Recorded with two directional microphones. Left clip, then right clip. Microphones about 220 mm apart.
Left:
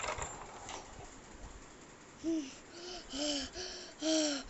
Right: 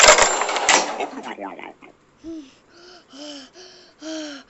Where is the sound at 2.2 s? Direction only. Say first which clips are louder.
Right 1 dB; centre (ahead or behind).